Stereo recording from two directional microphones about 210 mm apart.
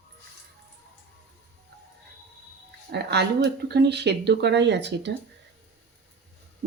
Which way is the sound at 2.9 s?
50° right (ahead or behind).